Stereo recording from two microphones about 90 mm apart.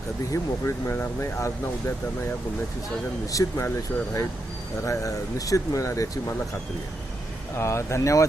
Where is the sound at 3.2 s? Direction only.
40° left (ahead or behind).